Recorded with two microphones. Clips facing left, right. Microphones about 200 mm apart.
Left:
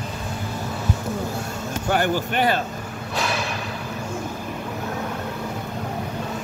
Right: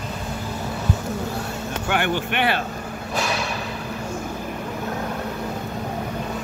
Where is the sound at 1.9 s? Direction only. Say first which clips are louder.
Left 2 dB; 40° left (ahead or behind).